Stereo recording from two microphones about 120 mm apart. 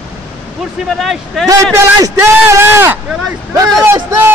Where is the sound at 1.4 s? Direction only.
25° right (ahead or behind).